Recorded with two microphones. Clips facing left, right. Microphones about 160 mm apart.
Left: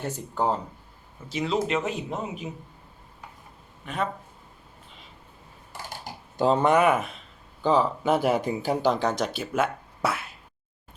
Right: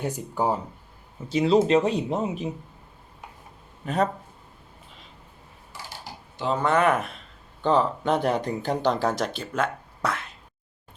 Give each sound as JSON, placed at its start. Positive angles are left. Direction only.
{"t": 0.0, "sound": "speech", "side_deg": -10}
{"t": 1.3, "sound": "speech", "side_deg": -30}
{"t": 3.8, "sound": "speech", "side_deg": -40}
{"t": 5.7, "sound": "typing", "side_deg": 50}
{"t": 6.3, "sound": "speech", "side_deg": 40}
{"t": 6.6, "sound": "speech", "side_deg": 15}